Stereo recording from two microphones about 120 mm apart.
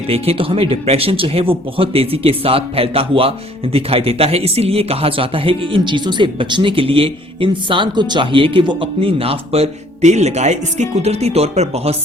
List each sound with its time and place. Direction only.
0.1 s speech: 50° right (ahead or behind)